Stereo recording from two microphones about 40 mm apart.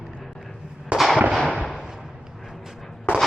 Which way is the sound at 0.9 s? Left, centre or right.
Centre.